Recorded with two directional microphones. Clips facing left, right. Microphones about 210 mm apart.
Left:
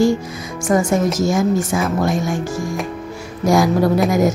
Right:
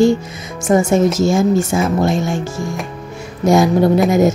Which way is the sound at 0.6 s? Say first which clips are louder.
Right 3 dB; 25° right (ahead or behind).